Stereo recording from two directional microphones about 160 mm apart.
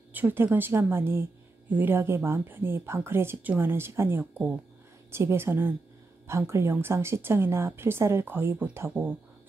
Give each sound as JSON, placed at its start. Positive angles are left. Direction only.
{"t": 0.1, "sound": "a woman's voice", "side_deg": -10}